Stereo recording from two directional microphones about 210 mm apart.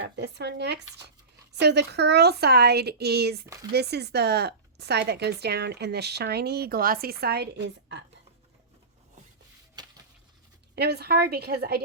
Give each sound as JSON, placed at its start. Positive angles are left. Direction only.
{"t": 0.2, "sound": "speech", "side_deg": -55}
{"t": 9.8, "sound": "a sound", "side_deg": -20}
{"t": 10.8, "sound": "speech", "side_deg": -50}